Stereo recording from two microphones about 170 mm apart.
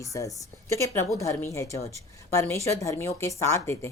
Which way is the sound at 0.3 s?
15° left (ahead or behind).